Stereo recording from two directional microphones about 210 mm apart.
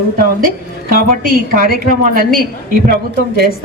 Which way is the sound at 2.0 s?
45° right (ahead or behind).